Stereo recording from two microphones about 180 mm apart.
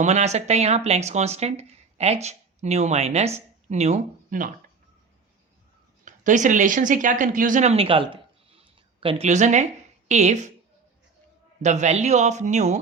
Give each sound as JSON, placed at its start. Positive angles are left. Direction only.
{"t": 0.0, "sound": "speech", "side_deg": -40}
{"t": 6.1, "sound": "speech", "side_deg": -45}
{"t": 11.6, "sound": "speech", "side_deg": -40}